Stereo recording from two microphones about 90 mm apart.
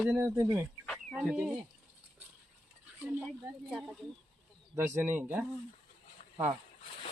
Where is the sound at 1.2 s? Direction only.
10° right (ahead or behind).